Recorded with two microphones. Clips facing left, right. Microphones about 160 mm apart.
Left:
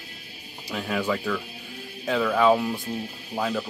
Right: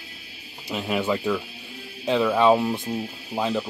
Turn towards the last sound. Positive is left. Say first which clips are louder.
# right 2 dB
turn(degrees=-25)  # may be behind; listen again after turning